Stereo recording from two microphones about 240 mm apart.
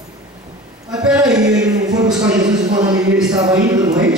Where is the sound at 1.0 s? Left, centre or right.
Centre.